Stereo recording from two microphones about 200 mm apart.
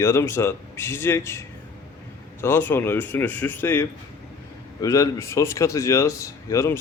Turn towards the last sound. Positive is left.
turn(degrees=15)  # may be behind; listen again after turning